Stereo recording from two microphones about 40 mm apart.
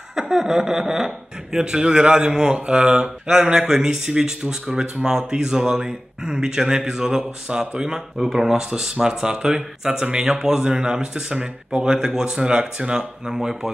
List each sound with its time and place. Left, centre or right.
0.1 s a man's voice: centre